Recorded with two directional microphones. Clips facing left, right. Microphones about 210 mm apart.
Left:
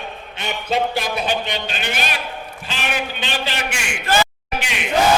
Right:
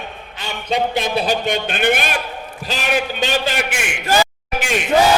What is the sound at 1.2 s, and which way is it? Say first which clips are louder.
Speech: right 4 dB; 50° right (ahead or behind).